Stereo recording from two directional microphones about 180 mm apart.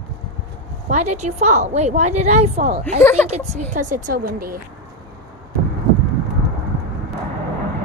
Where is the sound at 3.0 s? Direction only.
15° left (ahead or behind).